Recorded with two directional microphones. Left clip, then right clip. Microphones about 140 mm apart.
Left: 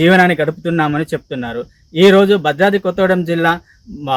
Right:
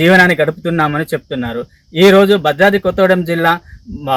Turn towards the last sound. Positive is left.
turn(degrees=5)  # may be behind; listen again after turning